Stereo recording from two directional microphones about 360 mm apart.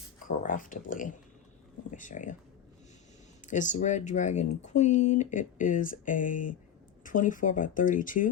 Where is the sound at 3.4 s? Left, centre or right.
Left.